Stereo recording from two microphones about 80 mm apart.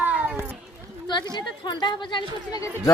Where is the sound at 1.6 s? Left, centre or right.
Left.